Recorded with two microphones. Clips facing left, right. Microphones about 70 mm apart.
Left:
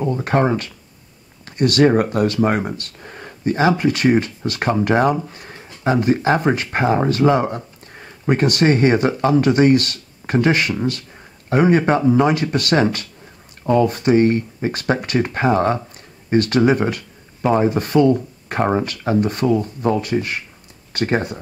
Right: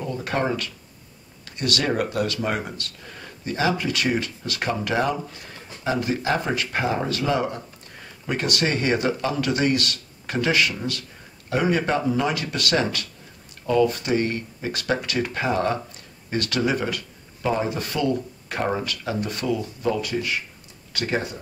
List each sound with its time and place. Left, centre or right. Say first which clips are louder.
0.0 s speech: left 7 dB; left